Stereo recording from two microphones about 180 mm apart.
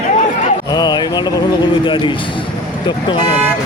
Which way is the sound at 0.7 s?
20° left (ahead or behind).